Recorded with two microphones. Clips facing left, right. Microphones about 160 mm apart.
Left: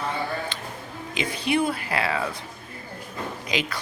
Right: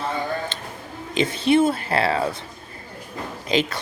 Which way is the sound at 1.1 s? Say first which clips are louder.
Right 6 dB; 25° right (ahead or behind).